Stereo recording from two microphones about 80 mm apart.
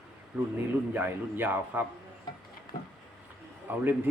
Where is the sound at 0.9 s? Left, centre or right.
Right.